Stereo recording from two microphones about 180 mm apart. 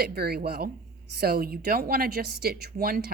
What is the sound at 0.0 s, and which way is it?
A woman's voice, 60° right (ahead or behind).